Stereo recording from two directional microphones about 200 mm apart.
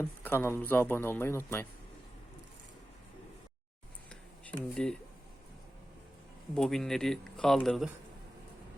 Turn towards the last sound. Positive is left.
turn(degrees=0)  # may be behind; listen again after turning